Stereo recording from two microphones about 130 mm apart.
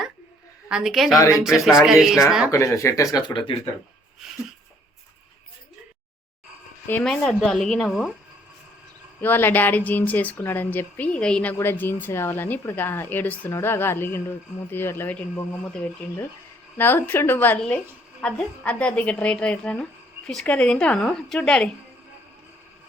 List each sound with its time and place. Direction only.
0.7 s speech: 5° right (ahead or behind)
2.5 s speech: 25° left (ahead or behind)
7.0 s speech: 5° left (ahead or behind)
9.2 s a woman's voice: 15° left (ahead or behind)